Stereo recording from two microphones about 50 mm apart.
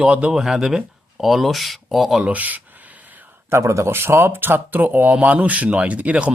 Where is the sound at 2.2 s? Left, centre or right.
Right.